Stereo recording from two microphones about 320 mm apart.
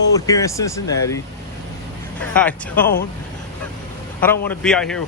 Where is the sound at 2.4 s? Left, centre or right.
Centre.